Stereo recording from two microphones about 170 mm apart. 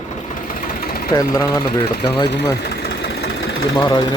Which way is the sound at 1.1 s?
20° left (ahead or behind).